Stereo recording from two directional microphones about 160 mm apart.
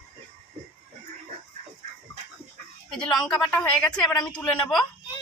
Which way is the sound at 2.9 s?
5° left (ahead or behind).